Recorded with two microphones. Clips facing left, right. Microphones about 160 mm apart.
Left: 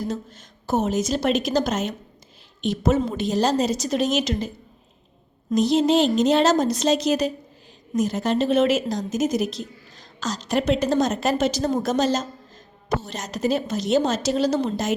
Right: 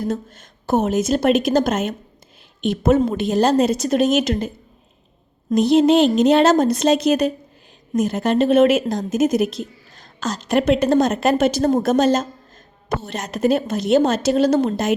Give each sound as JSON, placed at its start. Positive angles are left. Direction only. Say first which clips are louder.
{"t": 0.1, "sound": "a woman's voice", "louder": "right 5 dB", "side_deg": -55}